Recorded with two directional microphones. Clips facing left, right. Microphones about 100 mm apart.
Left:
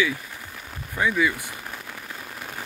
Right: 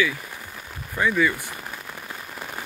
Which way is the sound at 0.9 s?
10° left (ahead or behind).